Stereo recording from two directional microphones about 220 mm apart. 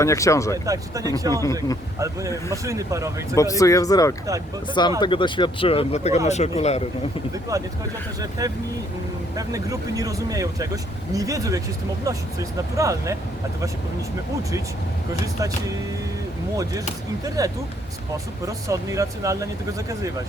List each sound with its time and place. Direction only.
0.0 s speech: 15° left (ahead or behind)
0.5 s speech: 15° right (ahead or behind)
1.3 s speech: 15° left (ahead or behind)
2.6 s speech: 15° right (ahead or behind)
3.3 s speech: 15° left (ahead or behind)
7.5 s speech: 15° right (ahead or behind)
17.2 s speech: 15° right (ahead or behind)